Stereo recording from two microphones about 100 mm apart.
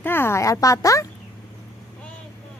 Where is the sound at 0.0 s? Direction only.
25° left (ahead or behind).